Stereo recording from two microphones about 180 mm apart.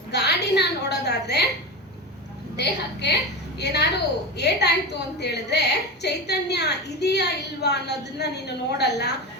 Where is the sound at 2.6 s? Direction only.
70° left (ahead or behind).